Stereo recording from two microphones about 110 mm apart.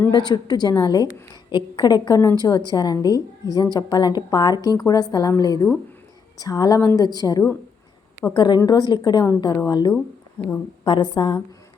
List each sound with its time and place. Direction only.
0.1 s a woman's voice: 40° left (ahead or behind)